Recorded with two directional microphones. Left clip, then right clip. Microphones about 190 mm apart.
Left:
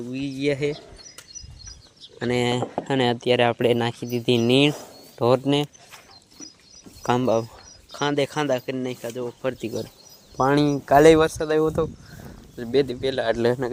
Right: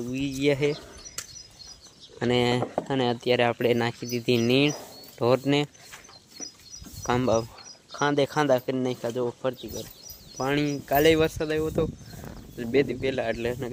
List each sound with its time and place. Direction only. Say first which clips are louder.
0.1 s speech: even; centre (ahead or behind)
2.1 s speech: left 1 dB; 5° left (ahead or behind)
2.8 s speech: left 8 dB; 20° left (ahead or behind)
7.0 s speech: left 3 dB; 20° left (ahead or behind); by 9.3 s 15° right (ahead or behind)
10.3 s speech: left 7 dB; 20° left (ahead or behind)